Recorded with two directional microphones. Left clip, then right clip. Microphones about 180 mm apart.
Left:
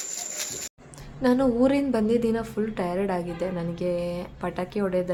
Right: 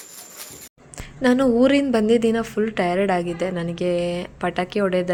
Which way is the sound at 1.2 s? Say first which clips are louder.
Right 5 dB; 15° right (ahead or behind).